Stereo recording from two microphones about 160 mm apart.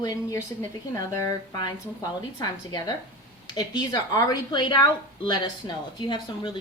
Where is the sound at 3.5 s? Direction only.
25° left (ahead or behind).